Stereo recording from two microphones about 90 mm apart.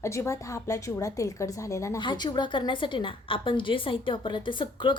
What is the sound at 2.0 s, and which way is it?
A woman's voice, 55° left (ahead or behind).